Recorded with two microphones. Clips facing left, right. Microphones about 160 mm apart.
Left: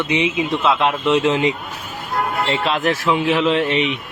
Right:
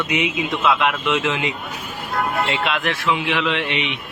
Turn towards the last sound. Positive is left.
turn(degrees=40)  # may be behind; listen again after turning